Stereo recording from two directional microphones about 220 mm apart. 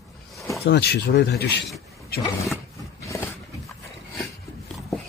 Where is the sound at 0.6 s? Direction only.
45° left (ahead or behind).